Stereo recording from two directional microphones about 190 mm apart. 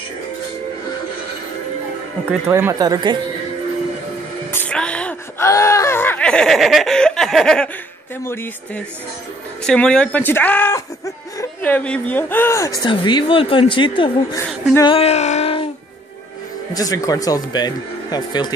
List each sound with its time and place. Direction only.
2.4 s speech: 15° right (ahead or behind)
4.5 s whimper: 10° left (ahead or behind)
8.3 s speech: 10° left (ahead or behind)
14.9 s a sound: 30° left (ahead or behind)
16.7 s speech: 20° left (ahead or behind)